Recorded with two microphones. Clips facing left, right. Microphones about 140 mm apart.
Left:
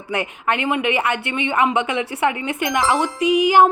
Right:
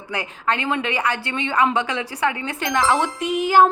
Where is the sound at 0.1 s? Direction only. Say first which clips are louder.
Left 2 dB; 20° left (ahead or behind).